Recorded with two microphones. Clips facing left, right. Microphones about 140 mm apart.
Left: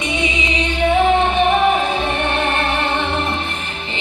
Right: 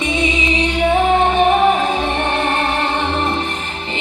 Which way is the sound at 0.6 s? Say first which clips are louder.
Left 1 dB; 40° right (ahead or behind).